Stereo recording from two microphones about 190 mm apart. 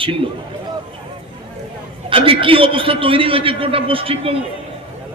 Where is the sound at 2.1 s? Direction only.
30° right (ahead or behind).